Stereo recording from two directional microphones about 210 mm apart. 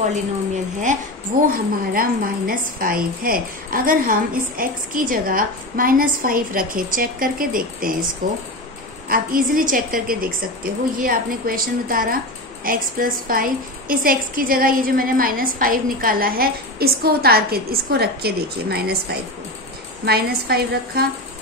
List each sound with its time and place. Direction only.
1.5 s a woman's voice: 45° right (ahead or behind)
20.1 s a woman's voice: 50° right (ahead or behind)